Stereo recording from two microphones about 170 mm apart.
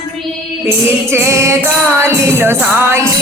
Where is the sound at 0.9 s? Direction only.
15° right (ahead or behind).